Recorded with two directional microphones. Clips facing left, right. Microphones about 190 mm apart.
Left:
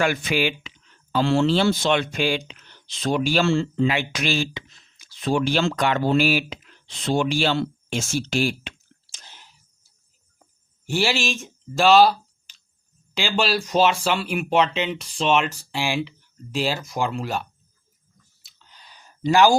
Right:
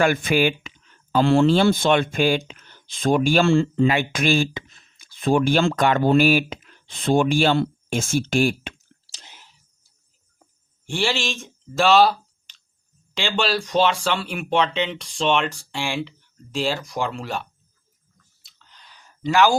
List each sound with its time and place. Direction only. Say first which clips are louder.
0.0 s speech: right 3 dB; 50° right (ahead or behind)
9.3 s whispering: even; centre (ahead or behind)
10.8 s speech: left 1 dB; 5° left (ahead or behind)
18.4 s a sound: left 1 dB; 10° left (ahead or behind)